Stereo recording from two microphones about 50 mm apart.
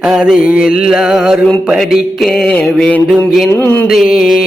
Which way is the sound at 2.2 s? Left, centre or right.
Centre.